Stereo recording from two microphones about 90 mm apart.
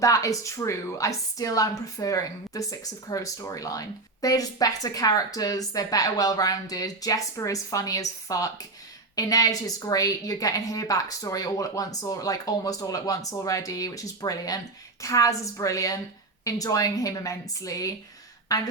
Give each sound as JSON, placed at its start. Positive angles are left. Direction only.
{"t": 0.0, "sound": "a woman's voice", "side_deg": 40}